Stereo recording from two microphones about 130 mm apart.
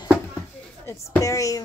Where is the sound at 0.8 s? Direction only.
20° left (ahead or behind).